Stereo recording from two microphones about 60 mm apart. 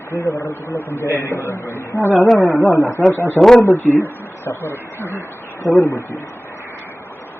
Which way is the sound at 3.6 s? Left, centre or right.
Left.